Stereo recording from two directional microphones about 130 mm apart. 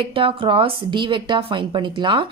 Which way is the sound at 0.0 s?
40° right (ahead or behind).